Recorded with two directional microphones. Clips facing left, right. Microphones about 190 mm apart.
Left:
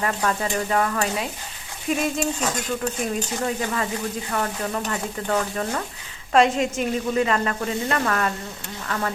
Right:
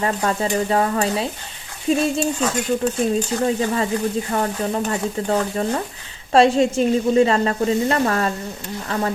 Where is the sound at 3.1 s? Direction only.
30° right (ahead or behind).